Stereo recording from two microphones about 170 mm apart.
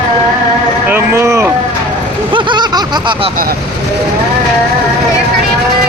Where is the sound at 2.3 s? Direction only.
25° right (ahead or behind).